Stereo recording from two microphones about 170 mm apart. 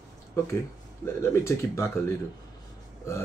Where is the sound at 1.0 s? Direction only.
15° left (ahead or behind).